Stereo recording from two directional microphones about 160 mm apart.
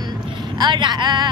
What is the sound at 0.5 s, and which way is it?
Speech, 25° right (ahead or behind).